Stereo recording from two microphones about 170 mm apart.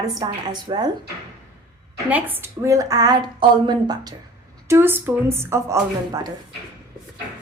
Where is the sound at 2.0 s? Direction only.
10° right (ahead or behind).